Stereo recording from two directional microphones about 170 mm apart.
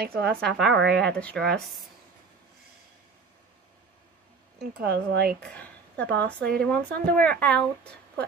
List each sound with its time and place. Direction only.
0.0 s speech: 65° right (ahead or behind)
0.3 s speech: centre (ahead or behind)
4.6 s speech: 75° right (ahead or behind)
5.4 s speech: 10° left (ahead or behind)